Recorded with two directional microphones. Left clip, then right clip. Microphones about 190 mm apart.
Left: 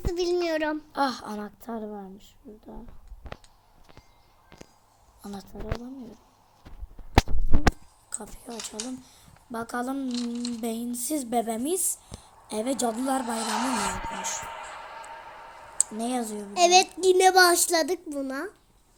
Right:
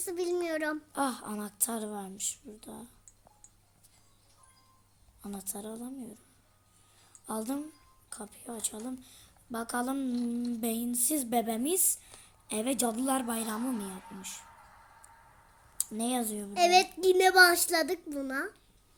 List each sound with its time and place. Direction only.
0.1 s a child's voice: 15° left (ahead or behind)
0.9 s a woman's voice: 5° right (ahead or behind)
5.2 s a woman's voice: 5° right (ahead or behind)
8.1 s a woman's voice: centre (ahead or behind)
10.1 s music: 50° left (ahead or behind)
10.6 s a woman's voice: 5° right (ahead or behind)
13.5 s music: 55° left (ahead or behind)
15.8 s a woman's voice: 5° right (ahead or behind)
16.6 s a child's voice: 15° left (ahead or behind)